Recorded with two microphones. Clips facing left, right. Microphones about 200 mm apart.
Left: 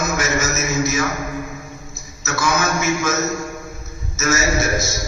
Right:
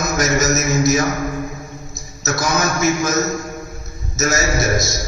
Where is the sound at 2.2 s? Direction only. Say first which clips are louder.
Right 1 dB; 40° right (ahead or behind).